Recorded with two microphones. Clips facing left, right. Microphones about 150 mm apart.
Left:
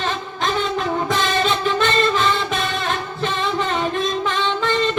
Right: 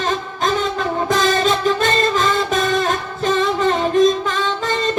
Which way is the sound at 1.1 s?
40° right (ahead or behind).